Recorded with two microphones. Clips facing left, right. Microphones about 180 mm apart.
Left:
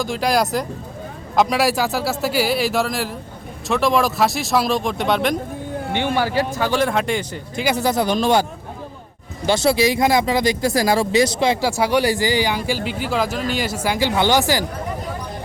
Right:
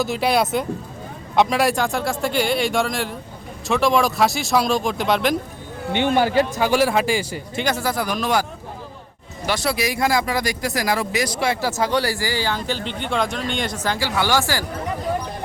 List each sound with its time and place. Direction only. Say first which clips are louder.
0.0 s speech: even; 5° right (ahead or behind)
5.9 s speech: right 3 dB; 20° right (ahead or behind)
7.8 s speech: left 5 dB; 20° left (ahead or behind)
9.5 s speech: left 6 dB; 25° left (ahead or behind)